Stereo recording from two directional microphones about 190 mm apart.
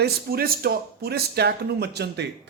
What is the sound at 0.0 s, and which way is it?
Speech, 55° right (ahead or behind).